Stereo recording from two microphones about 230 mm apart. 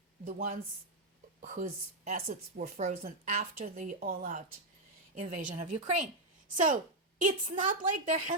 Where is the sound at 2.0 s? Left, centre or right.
Right.